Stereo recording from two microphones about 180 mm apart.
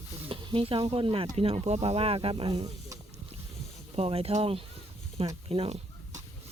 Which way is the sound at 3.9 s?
35° right (ahead or behind).